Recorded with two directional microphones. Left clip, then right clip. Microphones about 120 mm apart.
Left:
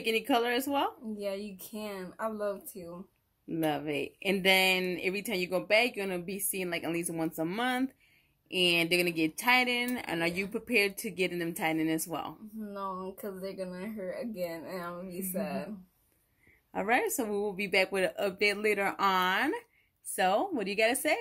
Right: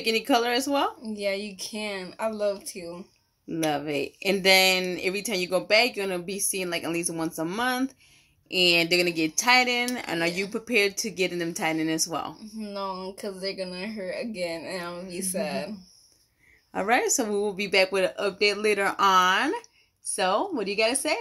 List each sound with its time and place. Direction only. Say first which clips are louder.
0.0 s speech: right 5 dB; 5° left (ahead or behind)
3.6 s speech: right 5 dB; 5° left (ahead or behind)
8.5 s speech: right 6 dB; centre (ahead or behind)
16.7 s speech: right 5 dB; centre (ahead or behind)